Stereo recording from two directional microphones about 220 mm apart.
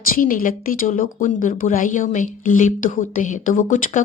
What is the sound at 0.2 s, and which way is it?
A woman's voice, 40° left (ahead or behind).